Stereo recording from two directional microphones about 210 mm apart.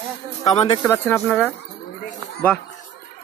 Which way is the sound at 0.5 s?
25° left (ahead or behind).